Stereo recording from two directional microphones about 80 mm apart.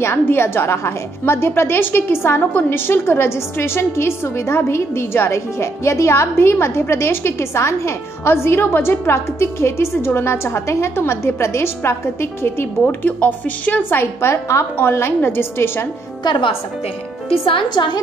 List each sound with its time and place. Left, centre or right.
0.0 s a woman's voice: left
16.3 s a woman's voice: left